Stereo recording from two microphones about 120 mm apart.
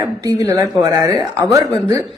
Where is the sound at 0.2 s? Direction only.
30° right (ahead or behind).